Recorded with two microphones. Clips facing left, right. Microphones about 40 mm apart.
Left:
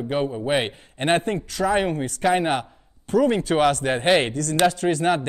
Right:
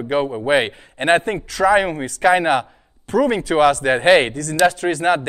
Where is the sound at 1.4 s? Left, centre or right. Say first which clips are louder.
Right 6 dB; right.